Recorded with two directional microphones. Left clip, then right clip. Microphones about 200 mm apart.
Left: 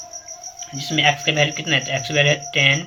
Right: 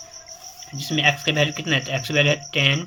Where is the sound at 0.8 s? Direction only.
25° right (ahead or behind).